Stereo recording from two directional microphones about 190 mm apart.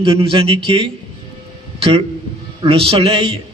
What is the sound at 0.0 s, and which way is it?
A man's voice, 30° right (ahead or behind).